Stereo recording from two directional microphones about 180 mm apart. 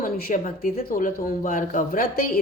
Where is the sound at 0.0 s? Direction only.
50° left (ahead or behind).